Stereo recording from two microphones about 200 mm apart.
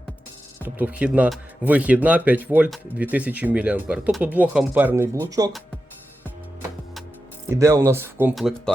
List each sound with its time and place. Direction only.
0.6 s speech: 10° right (ahead or behind)
7.5 s speech: 15° right (ahead or behind)
8.4 s speech: centre (ahead or behind)